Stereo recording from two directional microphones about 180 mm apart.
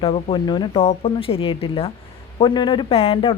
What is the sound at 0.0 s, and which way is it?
Speech, 30° left (ahead or behind).